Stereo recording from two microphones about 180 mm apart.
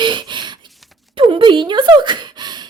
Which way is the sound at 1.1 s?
30° right (ahead or behind).